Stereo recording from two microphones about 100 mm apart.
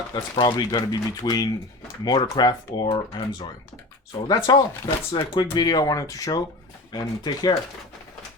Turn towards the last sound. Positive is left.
turn(degrees=40)  # may be behind; listen again after turning